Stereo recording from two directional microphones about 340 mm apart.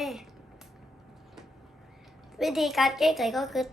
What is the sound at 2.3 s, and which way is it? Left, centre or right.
A woman's voice, centre.